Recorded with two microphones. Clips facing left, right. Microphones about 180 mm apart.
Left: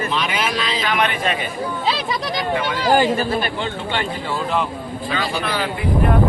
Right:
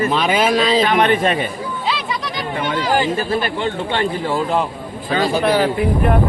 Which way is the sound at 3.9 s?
40° right (ahead or behind).